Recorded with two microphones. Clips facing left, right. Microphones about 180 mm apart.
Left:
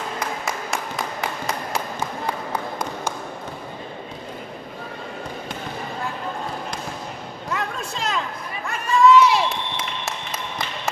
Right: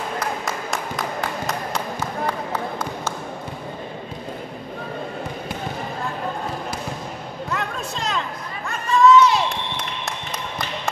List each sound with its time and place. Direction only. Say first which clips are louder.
7.5 s chatter: even; centre (ahead or behind)